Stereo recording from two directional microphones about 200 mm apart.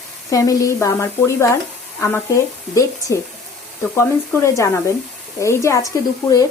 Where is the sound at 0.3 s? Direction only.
15° left (ahead or behind).